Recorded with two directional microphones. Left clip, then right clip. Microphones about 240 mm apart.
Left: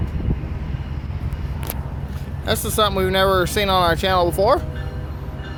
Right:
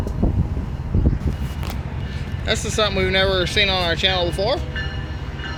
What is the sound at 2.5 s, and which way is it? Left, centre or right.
Speech, centre.